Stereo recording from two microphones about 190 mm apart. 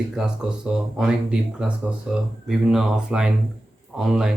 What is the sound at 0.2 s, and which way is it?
Speech, 5° right (ahead or behind).